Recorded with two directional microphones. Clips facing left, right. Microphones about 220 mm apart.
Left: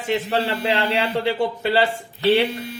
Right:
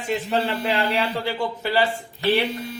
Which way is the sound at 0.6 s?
30° left (ahead or behind).